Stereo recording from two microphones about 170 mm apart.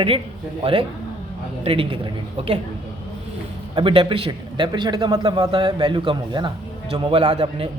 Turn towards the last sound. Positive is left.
turn(degrees=-35)  # may be behind; listen again after turning